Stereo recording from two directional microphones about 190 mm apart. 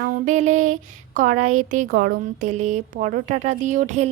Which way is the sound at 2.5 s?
40° right (ahead or behind).